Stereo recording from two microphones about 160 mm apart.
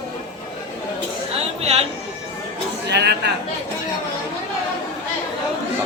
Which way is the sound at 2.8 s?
90° right.